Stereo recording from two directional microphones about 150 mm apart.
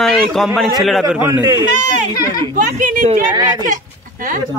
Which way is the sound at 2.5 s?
65° right (ahead or behind).